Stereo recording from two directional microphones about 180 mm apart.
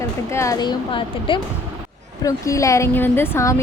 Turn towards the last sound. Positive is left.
turn(degrees=15)  # may be behind; listen again after turning